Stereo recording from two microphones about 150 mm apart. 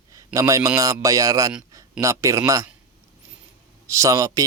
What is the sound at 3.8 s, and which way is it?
Speech, 20° right (ahead or behind).